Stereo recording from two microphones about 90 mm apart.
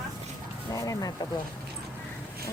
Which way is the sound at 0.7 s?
40° left (ahead or behind).